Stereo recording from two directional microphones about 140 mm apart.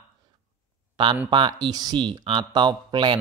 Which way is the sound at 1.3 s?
35° right (ahead or behind).